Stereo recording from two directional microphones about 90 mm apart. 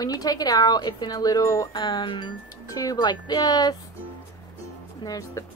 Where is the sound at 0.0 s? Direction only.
45° left (ahead or behind).